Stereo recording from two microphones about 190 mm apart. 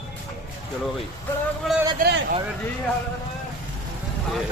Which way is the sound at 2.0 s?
65° right (ahead or behind).